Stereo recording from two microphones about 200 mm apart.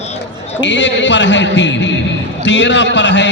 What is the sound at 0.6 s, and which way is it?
A man's voice, 65° left (ahead or behind).